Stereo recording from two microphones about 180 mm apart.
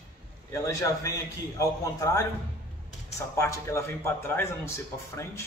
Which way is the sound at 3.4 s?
15° left (ahead or behind).